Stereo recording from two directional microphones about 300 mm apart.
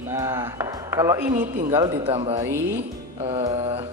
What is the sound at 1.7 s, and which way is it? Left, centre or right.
Speech, centre.